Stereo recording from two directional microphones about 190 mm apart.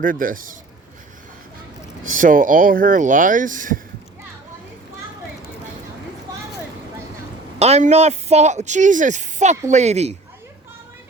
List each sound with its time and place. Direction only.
0.0 s speech: 45° right (ahead or behind)
2.0 s speech: 45° right (ahead or behind)
7.6 s speech: 35° right (ahead or behind)